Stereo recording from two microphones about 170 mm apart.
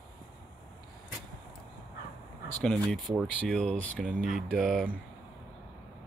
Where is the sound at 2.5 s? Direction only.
5° left (ahead or behind).